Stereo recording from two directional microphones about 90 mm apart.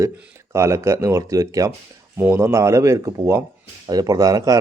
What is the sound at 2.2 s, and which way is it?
Speech, 25° right (ahead or behind).